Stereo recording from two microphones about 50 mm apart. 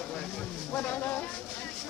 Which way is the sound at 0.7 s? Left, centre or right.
Left.